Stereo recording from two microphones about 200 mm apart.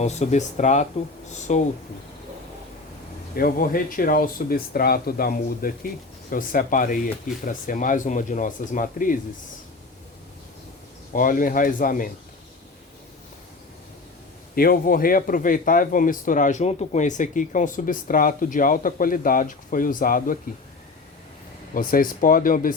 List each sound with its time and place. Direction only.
0.0 s speech: 35° left (ahead or behind)
3.3 s a man's voice: 45° left (ahead or behind)
11.1 s a man's voice: 40° left (ahead or behind)
14.5 s a man's voice: 45° left (ahead or behind)
21.8 s a man's voice: 45° left (ahead or behind)